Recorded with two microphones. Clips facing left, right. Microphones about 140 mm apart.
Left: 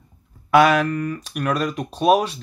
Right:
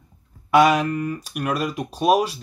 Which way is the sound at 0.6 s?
5° right (ahead or behind).